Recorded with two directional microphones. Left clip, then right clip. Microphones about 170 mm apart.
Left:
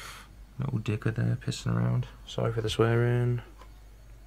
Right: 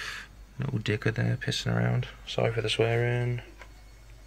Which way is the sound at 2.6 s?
40° left (ahead or behind).